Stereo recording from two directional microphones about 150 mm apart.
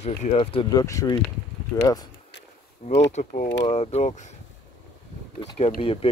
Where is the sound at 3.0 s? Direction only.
50° left (ahead or behind).